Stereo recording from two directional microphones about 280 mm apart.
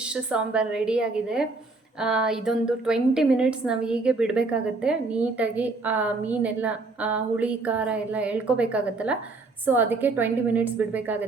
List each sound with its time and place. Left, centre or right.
0.0 s a woman's voice: centre